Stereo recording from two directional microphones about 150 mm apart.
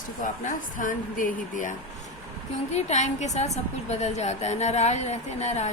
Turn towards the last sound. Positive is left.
turn(degrees=50)  # may be behind; listen again after turning